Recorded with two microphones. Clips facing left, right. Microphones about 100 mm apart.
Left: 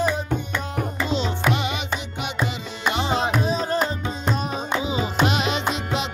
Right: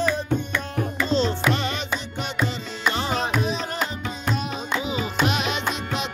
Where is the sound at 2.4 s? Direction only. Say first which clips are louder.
Right 1 dB; 20° left (ahead or behind).